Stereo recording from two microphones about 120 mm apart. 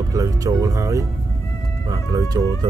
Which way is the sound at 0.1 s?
30° right (ahead or behind).